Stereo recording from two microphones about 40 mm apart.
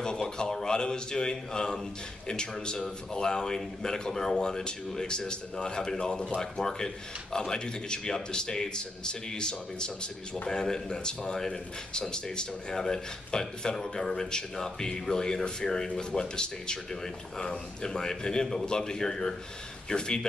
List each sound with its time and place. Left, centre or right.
0.0 s speech: centre